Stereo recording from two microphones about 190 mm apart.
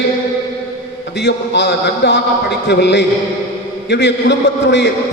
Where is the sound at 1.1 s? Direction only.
60° left (ahead or behind).